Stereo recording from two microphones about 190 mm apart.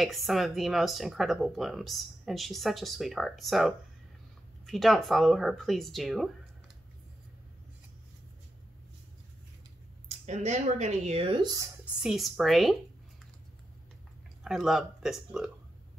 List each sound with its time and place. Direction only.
0.0 s speech: centre (ahead or behind)
10.0 s speech: 35° right (ahead or behind); by 11.7 s 20° right (ahead or behind)
11.8 s speech: 5° right (ahead or behind)
14.4 s speech: centre (ahead or behind)